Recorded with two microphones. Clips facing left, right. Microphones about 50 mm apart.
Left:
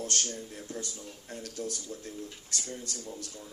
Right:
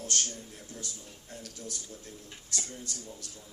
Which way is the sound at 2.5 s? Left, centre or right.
Right.